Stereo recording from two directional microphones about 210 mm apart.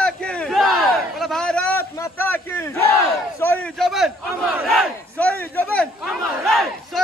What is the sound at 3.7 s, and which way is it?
Battle cry, centre (ahead or behind).